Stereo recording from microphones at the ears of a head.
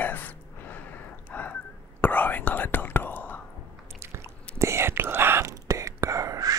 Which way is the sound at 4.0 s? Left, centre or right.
Right.